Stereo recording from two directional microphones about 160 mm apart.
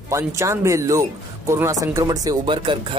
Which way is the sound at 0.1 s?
20° right (ahead or behind).